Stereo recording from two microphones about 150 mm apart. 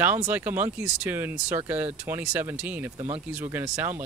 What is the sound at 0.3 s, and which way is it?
Speech, 15° right (ahead or behind).